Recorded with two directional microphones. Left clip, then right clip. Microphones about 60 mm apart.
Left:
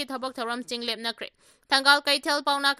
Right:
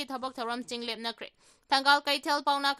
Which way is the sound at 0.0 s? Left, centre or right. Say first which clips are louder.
Left 4 dB; left.